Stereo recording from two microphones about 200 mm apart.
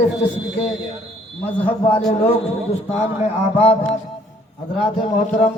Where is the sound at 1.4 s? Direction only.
10° left (ahead or behind).